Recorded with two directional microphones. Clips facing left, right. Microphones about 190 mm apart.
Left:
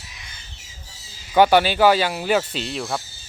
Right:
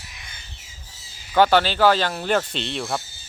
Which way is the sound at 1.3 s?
15° left (ahead or behind).